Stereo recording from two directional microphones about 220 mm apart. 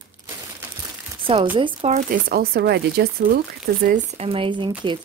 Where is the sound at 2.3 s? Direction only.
45° right (ahead or behind).